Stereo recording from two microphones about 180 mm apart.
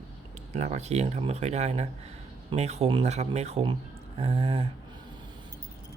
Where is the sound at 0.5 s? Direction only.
40° right (ahead or behind).